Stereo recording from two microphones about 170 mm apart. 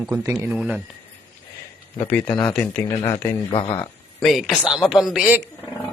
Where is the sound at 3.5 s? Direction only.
30° left (ahead or behind).